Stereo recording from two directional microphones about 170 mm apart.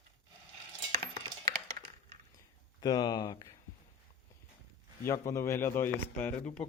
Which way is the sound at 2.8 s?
25° left (ahead or behind).